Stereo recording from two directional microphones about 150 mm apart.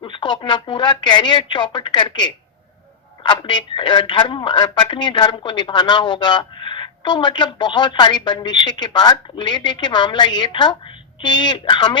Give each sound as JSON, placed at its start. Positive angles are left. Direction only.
{"t": 0.0, "sound": "speech", "side_deg": 30}